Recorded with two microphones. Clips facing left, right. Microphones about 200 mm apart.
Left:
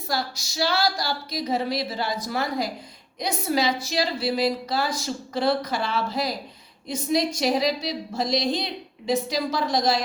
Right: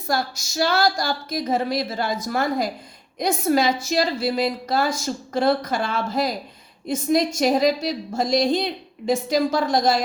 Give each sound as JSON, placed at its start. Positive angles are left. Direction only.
{"t": 0.1, "sound": "a woman's voice", "side_deg": -50}